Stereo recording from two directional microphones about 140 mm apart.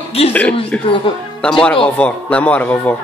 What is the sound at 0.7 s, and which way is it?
Speech, 10° left (ahead or behind).